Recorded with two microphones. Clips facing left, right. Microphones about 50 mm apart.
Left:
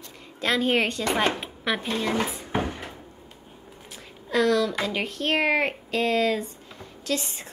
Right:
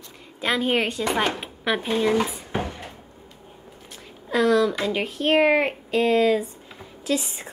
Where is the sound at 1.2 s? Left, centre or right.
Centre.